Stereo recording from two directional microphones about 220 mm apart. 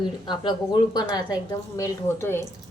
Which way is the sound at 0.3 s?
20° left (ahead or behind).